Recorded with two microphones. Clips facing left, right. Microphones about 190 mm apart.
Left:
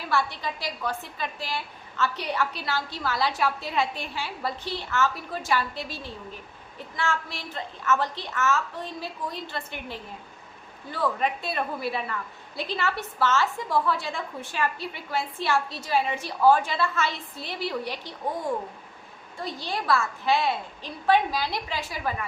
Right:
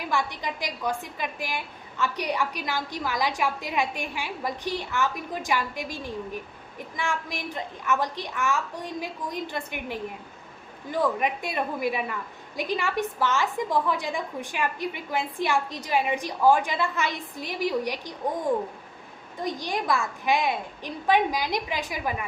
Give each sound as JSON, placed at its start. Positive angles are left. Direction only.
{"t": 0.0, "sound": "a woman's voice", "side_deg": -15}
{"t": 19.4, "sound": "a woman's voice", "side_deg": -15}